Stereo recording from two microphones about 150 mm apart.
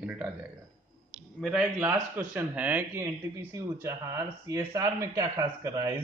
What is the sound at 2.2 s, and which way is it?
A man's voice, 10° right (ahead or behind).